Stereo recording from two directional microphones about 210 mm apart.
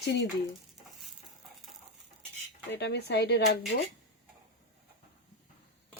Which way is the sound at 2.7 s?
55° left (ahead or behind).